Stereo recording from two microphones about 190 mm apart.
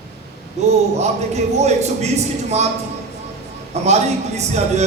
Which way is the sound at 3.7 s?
35° right (ahead or behind).